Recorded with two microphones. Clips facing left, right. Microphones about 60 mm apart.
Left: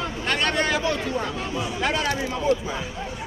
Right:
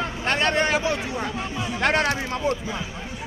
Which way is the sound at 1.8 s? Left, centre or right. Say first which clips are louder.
Right 5 dB; right.